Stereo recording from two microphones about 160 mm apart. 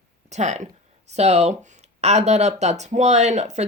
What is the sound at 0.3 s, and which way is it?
Speech, 45° right (ahead or behind).